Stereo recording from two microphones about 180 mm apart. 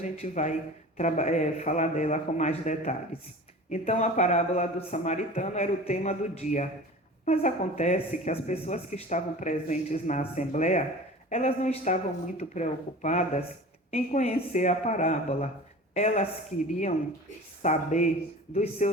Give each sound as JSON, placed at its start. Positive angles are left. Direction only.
{"t": 0.0, "sound": "speech", "side_deg": 40}
{"t": 17.6, "sound": "speech", "side_deg": 40}